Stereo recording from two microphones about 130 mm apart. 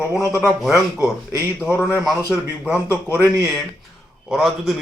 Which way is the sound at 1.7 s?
15° left (ahead or behind).